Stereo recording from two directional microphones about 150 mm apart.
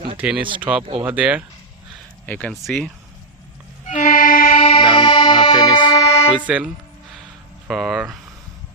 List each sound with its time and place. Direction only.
0.2 s speech: 10° right (ahead or behind)
2.2 s speech: 10° left (ahead or behind)
3.8 s music: 55° left (ahead or behind); by 4.5 s 70° left (ahead or behind)
4.5 s music: 35° left (ahead or behind)
6.5 s speech: 5° right (ahead or behind)
7.7 s speech: 5° right (ahead or behind)